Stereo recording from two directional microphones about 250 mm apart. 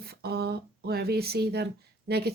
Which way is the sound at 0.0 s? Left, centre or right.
Right.